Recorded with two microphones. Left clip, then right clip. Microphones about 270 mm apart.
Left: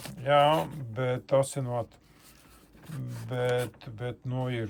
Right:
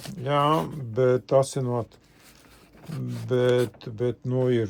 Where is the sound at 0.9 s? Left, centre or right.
Centre.